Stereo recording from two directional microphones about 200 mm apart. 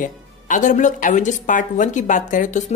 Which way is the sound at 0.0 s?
40° left (ahead or behind).